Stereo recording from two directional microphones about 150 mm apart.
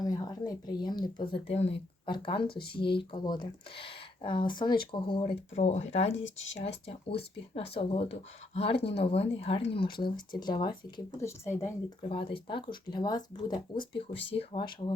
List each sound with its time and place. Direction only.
0.0 s a woman's voice: 25° left (ahead or behind)
1.2 s speech: 40° left (ahead or behind)
2.0 s speech: 30° left (ahead or behind)
11.2 s a woman's voice: 15° left (ahead or behind)
12.0 s speech: 35° left (ahead or behind)